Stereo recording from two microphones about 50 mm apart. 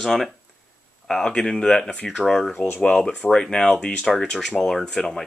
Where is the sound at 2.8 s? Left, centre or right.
Centre.